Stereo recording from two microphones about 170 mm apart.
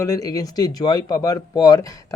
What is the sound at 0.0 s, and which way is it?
Speech, 20° left (ahead or behind).